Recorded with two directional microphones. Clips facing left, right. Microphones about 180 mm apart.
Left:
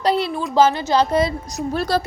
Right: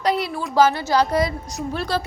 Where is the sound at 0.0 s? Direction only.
30° left (ahead or behind).